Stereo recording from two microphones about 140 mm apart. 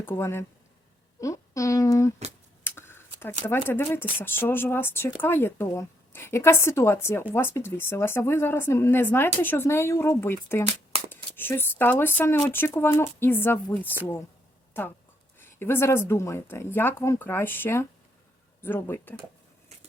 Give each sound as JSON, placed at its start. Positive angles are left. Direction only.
{"t": 0.0, "sound": "speech", "side_deg": 15}
{"t": 2.6, "sound": "a sound", "side_deg": 15}
{"t": 3.4, "sound": "speech", "side_deg": 15}